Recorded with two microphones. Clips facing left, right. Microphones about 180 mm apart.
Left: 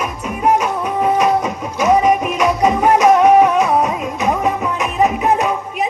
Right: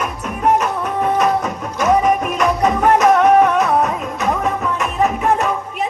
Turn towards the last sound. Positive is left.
turn(degrees=10)  # may be behind; listen again after turning